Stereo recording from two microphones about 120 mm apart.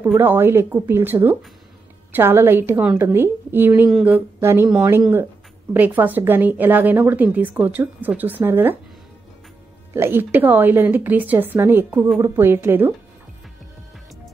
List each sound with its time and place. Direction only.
0.2 s a woman's voice: 20° right (ahead or behind)
5.7 s a woman's voice: 15° right (ahead or behind)
9.9 s a woman's voice: 20° right (ahead or behind)